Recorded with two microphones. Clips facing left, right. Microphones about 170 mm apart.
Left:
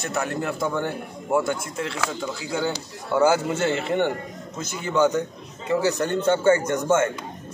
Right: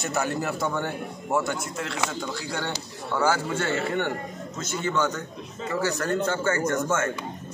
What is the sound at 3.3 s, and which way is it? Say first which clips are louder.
Speech: left 4 dB; 20° left (ahead or behind).